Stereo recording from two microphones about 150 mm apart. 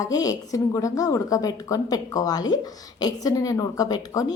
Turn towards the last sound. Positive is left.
turn(degrees=25)  # may be behind; listen again after turning